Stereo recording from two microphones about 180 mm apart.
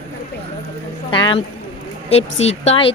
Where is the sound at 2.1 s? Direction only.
35° left (ahead or behind).